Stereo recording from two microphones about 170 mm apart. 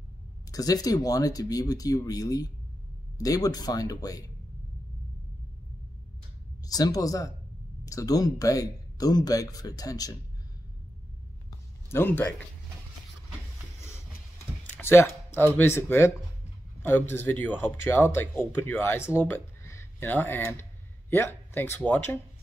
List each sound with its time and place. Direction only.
0.5 s speech: 20° left (ahead or behind)
6.6 s speech: 20° left (ahead or behind)
11.9 s speech: 10° left (ahead or behind)
14.7 s speech: 15° left (ahead or behind)
17.1 s speech: 15° left (ahead or behind)